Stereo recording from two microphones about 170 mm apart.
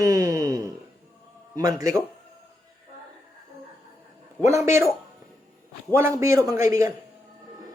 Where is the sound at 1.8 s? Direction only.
20° right (ahead or behind).